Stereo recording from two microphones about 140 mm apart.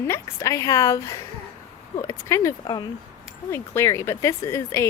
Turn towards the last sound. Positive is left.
turn(degrees=20)  # may be behind; listen again after turning